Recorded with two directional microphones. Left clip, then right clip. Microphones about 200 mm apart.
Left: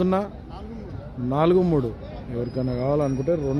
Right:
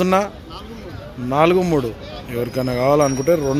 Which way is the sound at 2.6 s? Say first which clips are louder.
Right 8 dB; 10° right (ahead or behind).